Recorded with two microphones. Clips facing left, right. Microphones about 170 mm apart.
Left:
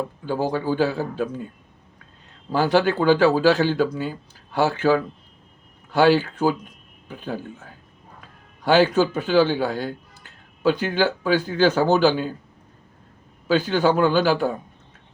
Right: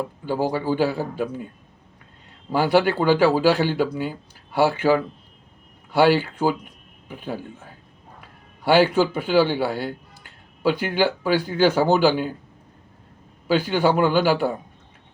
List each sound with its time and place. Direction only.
0.0 s speech: 10° right (ahead or behind)
2.5 s a man's voice: 10° right (ahead or behind)
13.5 s speech: 10° right (ahead or behind)